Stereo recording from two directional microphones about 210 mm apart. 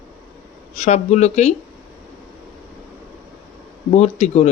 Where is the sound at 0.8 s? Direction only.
35° left (ahead or behind).